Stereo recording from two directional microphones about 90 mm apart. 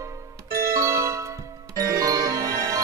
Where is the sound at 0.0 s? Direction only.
35° right (ahead or behind).